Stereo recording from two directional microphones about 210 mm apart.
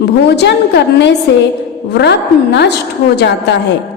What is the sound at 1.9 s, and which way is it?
Speech, 55° left (ahead or behind).